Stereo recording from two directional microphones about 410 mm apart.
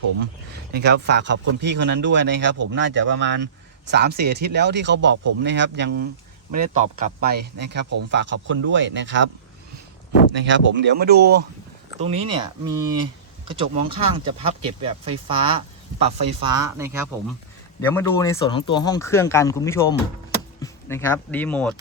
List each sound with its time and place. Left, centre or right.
0.7 s a man's voice: right
10.4 s a man's voice: right; by 17.0 s centre
17.7 s speech: centre